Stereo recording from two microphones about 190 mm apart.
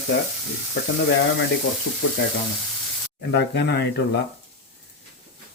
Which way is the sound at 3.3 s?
60° left (ahead or behind).